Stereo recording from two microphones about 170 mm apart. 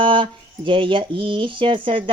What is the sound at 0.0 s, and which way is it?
Speech, 30° right (ahead or behind).